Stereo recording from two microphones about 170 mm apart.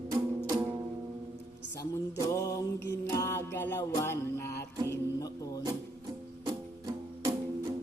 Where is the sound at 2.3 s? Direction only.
20° left (ahead or behind).